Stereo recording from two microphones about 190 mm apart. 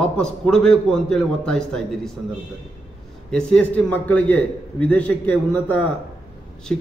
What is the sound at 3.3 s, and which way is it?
A man's voice, 5° left (ahead or behind).